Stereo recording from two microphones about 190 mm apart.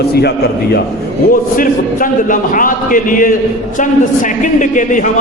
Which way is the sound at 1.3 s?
45° left (ahead or behind).